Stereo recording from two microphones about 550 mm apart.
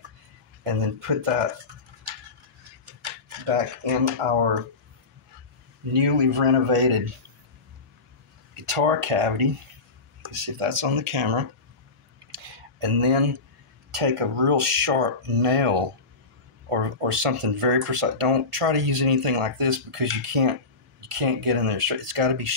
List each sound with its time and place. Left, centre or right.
0.7 s speech: right
3.4 s speech: right
6.0 s speech: right
8.5 s speech: right
12.8 s speech: right